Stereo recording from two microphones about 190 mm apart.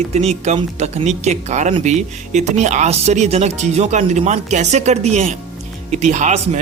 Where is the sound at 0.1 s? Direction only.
35° right (ahead or behind).